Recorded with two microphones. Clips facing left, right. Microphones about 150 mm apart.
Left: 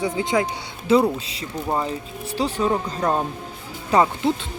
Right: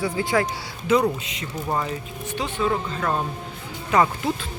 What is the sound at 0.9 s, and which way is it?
Speech, 30° left (ahead or behind).